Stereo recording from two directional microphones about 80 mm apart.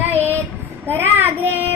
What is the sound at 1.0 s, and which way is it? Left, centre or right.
Speech, right.